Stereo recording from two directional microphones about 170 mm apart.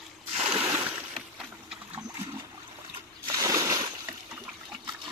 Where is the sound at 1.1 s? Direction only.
Centre (ahead or behind).